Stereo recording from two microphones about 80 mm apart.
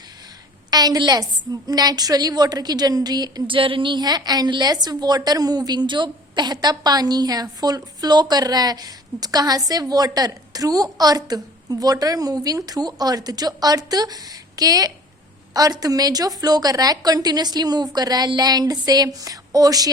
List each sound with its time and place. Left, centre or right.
0.7 s a woman's voice: right